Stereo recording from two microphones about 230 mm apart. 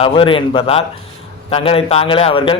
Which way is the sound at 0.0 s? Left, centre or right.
Left.